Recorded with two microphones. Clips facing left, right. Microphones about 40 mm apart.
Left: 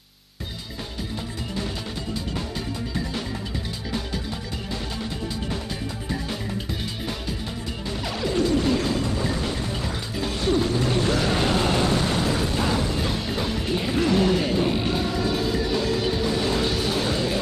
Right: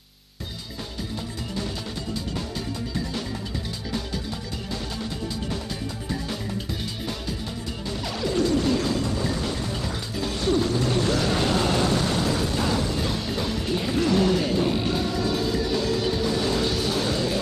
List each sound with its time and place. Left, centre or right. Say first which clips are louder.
8.0 s music: left 1 dB; left